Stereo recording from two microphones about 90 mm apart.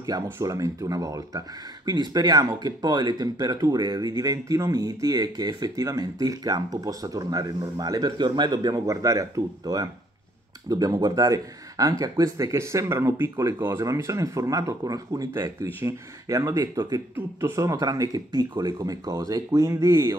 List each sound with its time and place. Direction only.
0.0 s speech: 40° right (ahead or behind)
1.9 s speech: 50° right (ahead or behind)
8.8 s speech: 35° right (ahead or behind)